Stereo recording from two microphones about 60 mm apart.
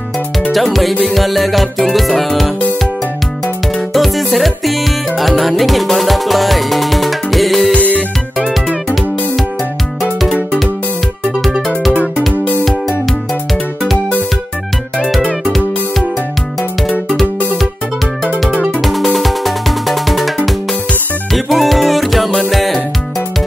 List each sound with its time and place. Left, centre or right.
0.5 s music: centre
7.7 s music: left
18.7 s music: centre